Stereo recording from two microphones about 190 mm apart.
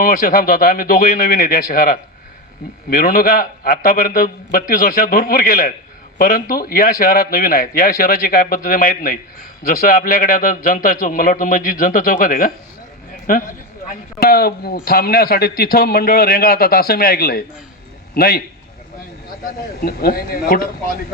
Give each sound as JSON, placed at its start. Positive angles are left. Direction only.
{"t": 0.0, "sound": "a man's voice", "side_deg": 50}
{"t": 19.8, "sound": "a man's voice", "side_deg": 50}